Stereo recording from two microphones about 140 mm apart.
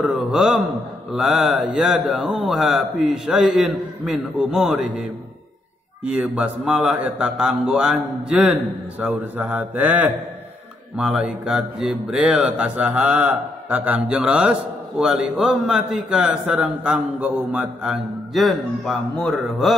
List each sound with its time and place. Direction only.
0.0 s speech: 5° right (ahead or behind)
6.0 s speech: 10° right (ahead or behind)